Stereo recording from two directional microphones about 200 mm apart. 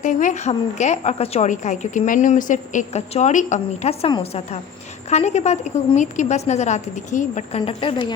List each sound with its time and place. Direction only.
0.0 s a woman's voice: 40° left (ahead or behind); by 8.1 s 25° left (ahead or behind)